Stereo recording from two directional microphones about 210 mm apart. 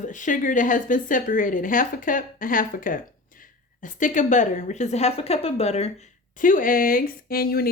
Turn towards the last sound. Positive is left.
turn(degrees=45)  # may be behind; listen again after turning